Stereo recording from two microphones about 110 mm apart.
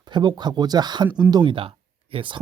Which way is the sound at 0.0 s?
40° right (ahead or behind).